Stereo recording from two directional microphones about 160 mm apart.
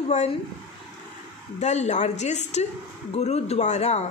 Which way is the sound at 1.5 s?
45° left (ahead or behind).